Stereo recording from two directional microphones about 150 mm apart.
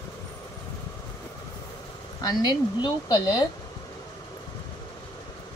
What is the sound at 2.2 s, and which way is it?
Speech, 30° left (ahead or behind).